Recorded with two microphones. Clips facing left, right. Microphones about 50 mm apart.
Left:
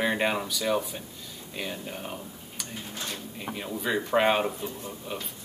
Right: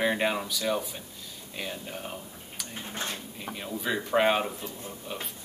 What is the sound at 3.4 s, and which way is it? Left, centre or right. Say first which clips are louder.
Speech: left 2 dB; centre.